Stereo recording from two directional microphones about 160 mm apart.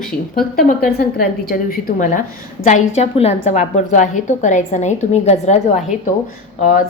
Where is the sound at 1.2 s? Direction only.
65° left (ahead or behind); by 5.8 s 45° left (ahead or behind).